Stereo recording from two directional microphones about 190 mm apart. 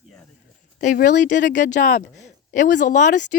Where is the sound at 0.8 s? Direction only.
45° left (ahead or behind).